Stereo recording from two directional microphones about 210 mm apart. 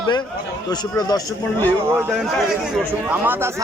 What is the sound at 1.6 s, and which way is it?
Speech, 10° right (ahead or behind).